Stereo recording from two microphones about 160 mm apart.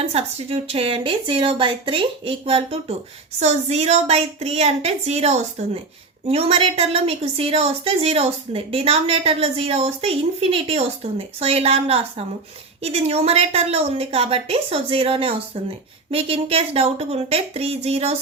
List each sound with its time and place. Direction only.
0.1 s a woman's voice: 40° right (ahead or behind)